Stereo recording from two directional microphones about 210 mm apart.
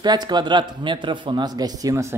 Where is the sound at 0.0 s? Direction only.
20° right (ahead or behind).